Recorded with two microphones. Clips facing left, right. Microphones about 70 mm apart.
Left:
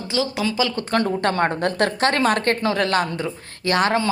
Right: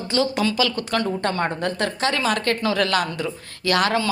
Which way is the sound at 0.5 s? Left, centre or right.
Left.